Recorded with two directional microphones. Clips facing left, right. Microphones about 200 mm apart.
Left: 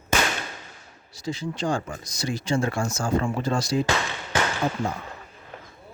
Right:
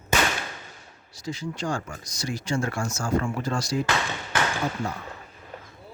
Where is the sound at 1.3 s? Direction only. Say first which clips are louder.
Left 3 dB; 25° left (ahead or behind).